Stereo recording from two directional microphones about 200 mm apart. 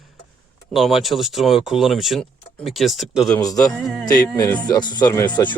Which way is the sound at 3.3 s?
20° left (ahead or behind).